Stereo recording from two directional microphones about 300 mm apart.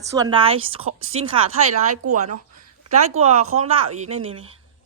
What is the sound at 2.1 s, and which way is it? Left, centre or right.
Speech, right.